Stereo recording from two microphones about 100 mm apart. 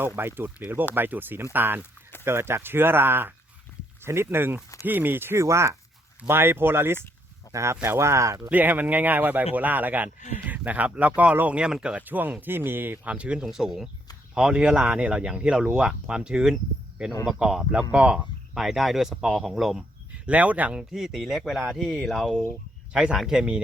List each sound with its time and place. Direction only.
0.2 s speech: 20° right (ahead or behind)
8.4 s speech: 15° right (ahead or behind)
20.2 s speech: 15° right (ahead or behind)